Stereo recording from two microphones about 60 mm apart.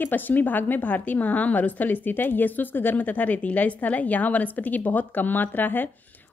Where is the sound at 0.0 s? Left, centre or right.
Left.